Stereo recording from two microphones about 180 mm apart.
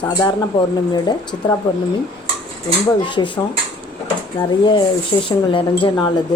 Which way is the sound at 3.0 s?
25° left (ahead or behind).